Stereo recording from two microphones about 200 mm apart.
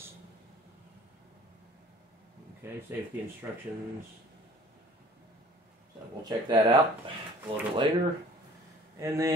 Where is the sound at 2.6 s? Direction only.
10° right (ahead or behind).